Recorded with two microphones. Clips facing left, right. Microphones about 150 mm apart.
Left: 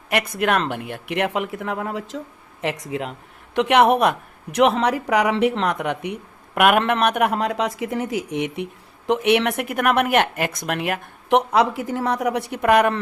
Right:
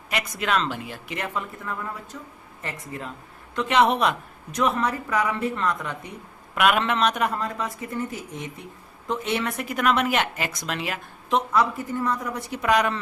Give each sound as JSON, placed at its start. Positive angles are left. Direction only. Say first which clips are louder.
{"t": 0.1, "sound": "speech", "louder": "left 5 dB", "side_deg": 60}
{"t": 4.5, "sound": "speech", "louder": "left 6 dB", "side_deg": 85}
{"t": 6.5, "sound": "speech", "louder": "left 4 dB", "side_deg": 55}